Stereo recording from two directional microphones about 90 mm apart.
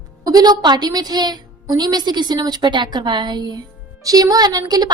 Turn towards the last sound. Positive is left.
turn(degrees=-45)  # may be behind; listen again after turning